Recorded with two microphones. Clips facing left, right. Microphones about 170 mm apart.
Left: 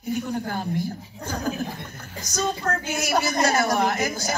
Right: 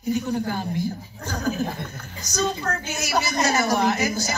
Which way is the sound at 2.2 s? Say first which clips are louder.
Right 1 dB; 55° left (ahead or behind).